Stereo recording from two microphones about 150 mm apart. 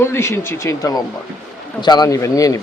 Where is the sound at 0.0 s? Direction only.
15° left (ahead or behind).